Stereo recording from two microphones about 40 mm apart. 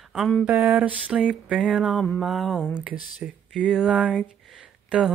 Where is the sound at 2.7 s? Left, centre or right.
Right.